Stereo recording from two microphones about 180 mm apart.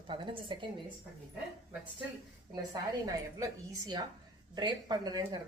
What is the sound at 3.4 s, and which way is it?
Speech, 20° right (ahead or behind).